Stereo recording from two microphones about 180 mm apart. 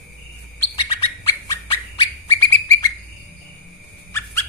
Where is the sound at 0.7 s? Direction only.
30° left (ahead or behind).